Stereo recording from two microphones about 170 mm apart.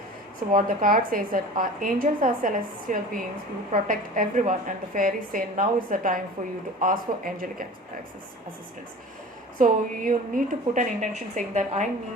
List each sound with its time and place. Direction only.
0.5 s a woman's voice: 55° right (ahead or behind)
9.6 s a woman's voice: 50° right (ahead or behind)